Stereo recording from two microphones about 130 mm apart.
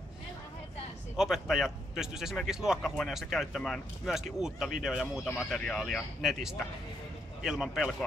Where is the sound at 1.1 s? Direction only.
5° right (ahead or behind).